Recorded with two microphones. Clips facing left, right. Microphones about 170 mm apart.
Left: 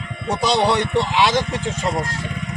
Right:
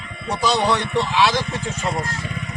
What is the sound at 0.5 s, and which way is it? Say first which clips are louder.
Speech: left 3 dB; 10° left (ahead or behind).